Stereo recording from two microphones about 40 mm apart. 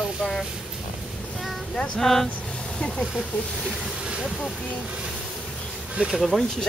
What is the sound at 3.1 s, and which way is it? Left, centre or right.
Speech, centre.